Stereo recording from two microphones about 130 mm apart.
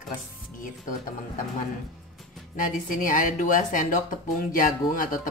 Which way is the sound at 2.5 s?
85° left.